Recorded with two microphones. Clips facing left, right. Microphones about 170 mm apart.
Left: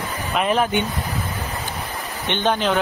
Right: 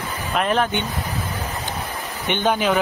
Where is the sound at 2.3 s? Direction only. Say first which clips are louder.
Right 1 dB; 10° right (ahead or behind).